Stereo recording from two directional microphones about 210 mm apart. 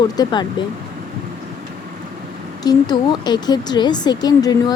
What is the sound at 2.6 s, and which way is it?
Speech, 20° left (ahead or behind).